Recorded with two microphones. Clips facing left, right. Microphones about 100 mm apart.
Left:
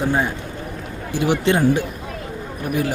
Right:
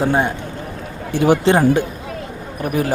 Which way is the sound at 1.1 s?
45° right (ahead or behind).